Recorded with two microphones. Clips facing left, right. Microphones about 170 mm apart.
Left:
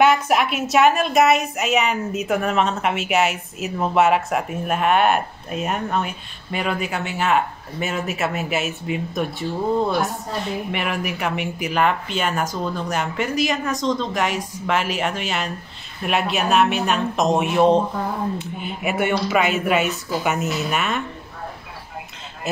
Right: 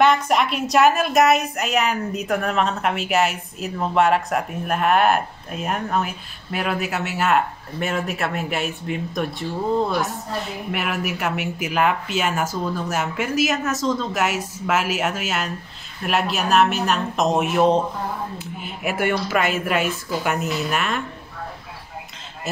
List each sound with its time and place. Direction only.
0.0 s a woman's voice: 5° left (ahead or behind)
10.7 s a woman's voice: 5° right (ahead or behind)